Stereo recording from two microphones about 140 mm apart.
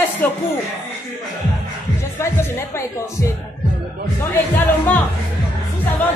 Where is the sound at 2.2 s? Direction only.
20° left (ahead or behind).